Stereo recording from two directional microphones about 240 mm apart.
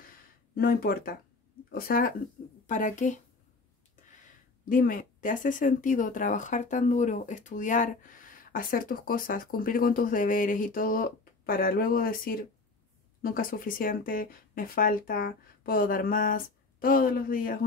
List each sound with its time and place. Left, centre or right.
0.6 s speech: left
4.2 s speech: left